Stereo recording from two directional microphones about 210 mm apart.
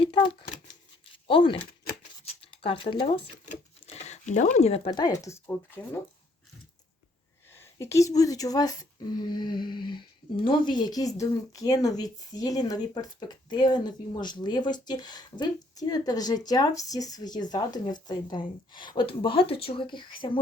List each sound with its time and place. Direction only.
0.0 s speech: 25° left (ahead or behind)
0.7 s a sound: 25° left (ahead or behind)
4.9 s speech: 20° left (ahead or behind)
7.5 s speech: 10° left (ahead or behind)